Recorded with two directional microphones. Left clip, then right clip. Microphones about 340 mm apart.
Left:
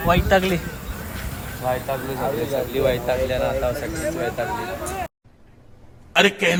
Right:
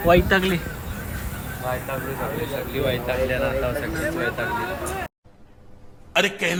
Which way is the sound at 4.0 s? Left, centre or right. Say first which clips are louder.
Even; centre.